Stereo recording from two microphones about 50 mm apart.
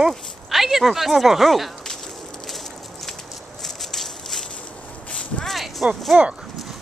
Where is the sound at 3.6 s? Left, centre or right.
Centre.